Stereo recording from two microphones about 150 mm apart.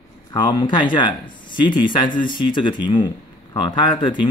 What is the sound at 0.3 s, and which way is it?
Speech, 30° left (ahead or behind).